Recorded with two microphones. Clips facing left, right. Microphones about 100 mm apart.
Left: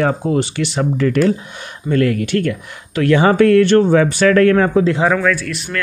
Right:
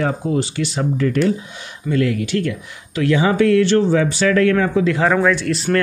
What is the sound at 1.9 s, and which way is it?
Speech, 55° left (ahead or behind).